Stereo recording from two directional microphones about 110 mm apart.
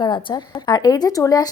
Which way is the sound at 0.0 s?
50° left (ahead or behind).